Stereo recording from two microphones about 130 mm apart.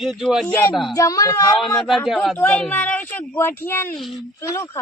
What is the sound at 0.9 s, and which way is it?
Speech, 25° left (ahead or behind).